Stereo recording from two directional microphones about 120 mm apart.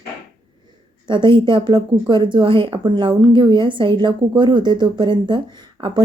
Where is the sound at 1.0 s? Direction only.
40° right (ahead or behind).